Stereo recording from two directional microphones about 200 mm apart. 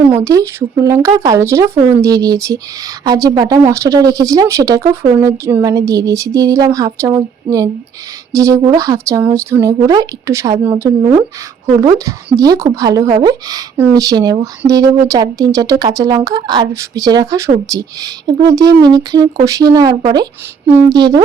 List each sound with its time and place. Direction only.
0.2 s a woman's voice: 15° right (ahead or behind)